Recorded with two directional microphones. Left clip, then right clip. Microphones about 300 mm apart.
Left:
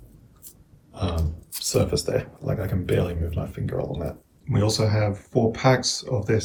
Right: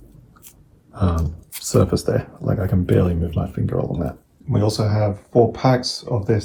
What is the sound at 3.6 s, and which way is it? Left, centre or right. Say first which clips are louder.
Speech: right 4 dB; centre.